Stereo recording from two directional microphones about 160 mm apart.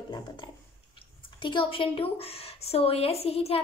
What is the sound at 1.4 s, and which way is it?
Speech, 30° left (ahead or behind).